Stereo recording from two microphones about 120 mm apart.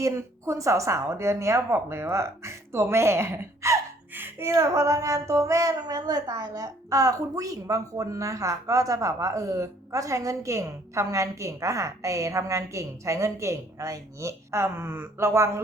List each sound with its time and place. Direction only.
0.0 s a woman's voice: 25° right (ahead or behind)